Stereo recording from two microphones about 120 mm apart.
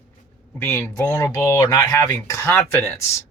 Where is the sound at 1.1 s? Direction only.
30° left (ahead or behind).